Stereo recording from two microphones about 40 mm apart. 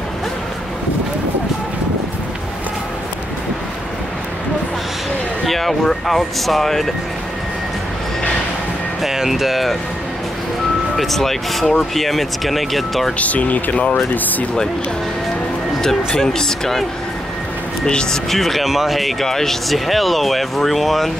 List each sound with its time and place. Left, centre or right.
5.4 s speech: centre
9.0 s speech: centre
11.0 s speech: centre
13.2 s speech: left
13.7 s speech: left
16.2 s speech: centre
17.8 s speech: centre
18.3 s speech: centre